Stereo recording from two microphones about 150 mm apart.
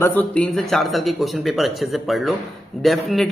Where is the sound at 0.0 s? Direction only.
10° left (ahead or behind).